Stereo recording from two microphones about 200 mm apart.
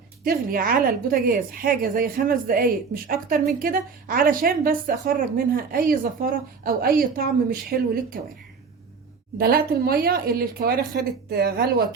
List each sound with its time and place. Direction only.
0.3 s a woman's voice: 45° right (ahead or behind)
9.4 s a woman's voice: 50° right (ahead or behind)